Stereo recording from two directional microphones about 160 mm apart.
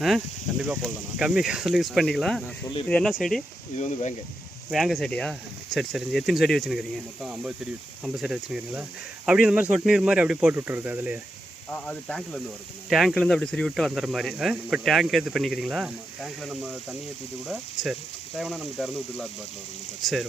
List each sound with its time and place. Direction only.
0.6 s speech: 5° right (ahead or behind)
3.8 s speech: 50° left (ahead or behind)
4.7 s speech: centre (ahead or behind)
11.7 s speech: 5° left (ahead or behind)